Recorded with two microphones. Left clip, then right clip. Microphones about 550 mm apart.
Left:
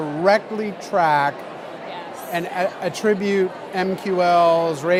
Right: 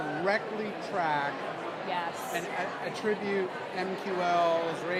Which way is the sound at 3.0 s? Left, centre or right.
Left.